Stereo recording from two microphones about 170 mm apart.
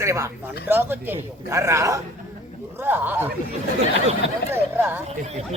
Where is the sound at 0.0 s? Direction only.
15° right (ahead or behind).